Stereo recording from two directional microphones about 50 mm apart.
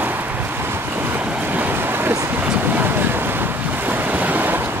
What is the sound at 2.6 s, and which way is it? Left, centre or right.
Waves, right.